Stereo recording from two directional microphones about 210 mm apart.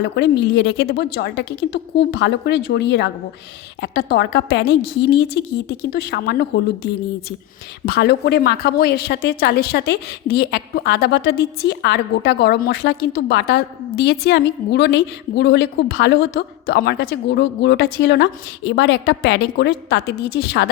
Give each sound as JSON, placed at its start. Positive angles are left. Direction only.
{"t": 0.0, "sound": "a woman's voice", "side_deg": 50}